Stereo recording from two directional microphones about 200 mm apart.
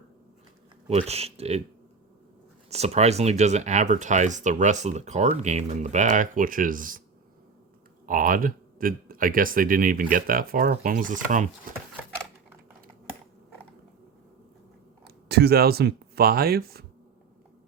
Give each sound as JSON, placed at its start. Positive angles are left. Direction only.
{"t": 0.9, "sound": "speech", "side_deg": -30}
{"t": 2.6, "sound": "speech", "side_deg": -30}
{"t": 8.0, "sound": "speech", "side_deg": -45}
{"t": 15.0, "sound": "speech", "side_deg": -55}